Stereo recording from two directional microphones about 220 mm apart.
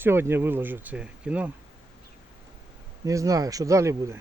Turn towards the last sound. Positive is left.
turn(degrees=-15)  # may be behind; listen again after turning